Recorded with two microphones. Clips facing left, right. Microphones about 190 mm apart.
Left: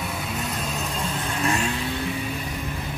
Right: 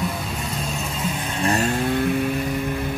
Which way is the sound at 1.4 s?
40° right (ahead or behind).